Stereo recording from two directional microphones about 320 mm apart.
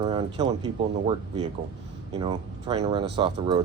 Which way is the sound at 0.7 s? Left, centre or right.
Centre.